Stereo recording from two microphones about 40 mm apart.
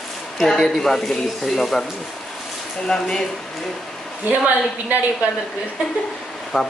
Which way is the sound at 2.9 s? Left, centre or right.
Centre.